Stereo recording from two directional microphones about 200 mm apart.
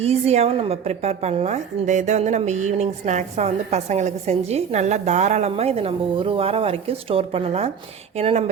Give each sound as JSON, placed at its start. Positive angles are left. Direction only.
{"t": 0.0, "sound": "a woman's voice", "side_deg": -30}